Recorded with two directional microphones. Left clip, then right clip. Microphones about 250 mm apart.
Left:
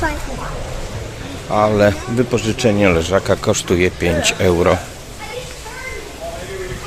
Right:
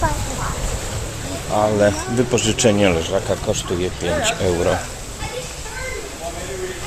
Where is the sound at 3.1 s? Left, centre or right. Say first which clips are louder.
Left 5 dB; left.